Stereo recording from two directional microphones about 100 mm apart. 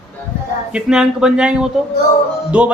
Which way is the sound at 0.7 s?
5° right (ahead or behind).